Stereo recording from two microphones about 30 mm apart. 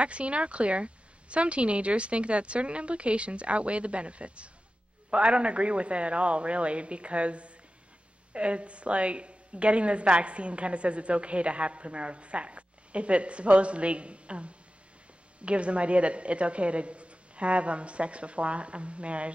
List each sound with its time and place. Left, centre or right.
0.0 s a woman's voice: right